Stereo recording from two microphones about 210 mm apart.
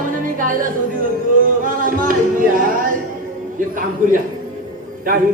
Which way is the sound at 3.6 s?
40° right (ahead or behind).